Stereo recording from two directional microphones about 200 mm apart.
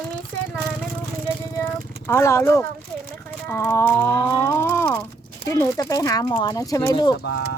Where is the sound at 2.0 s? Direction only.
15° left (ahead or behind).